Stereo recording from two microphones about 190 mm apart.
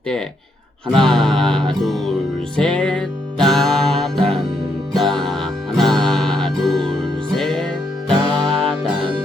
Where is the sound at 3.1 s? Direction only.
20° right (ahead or behind).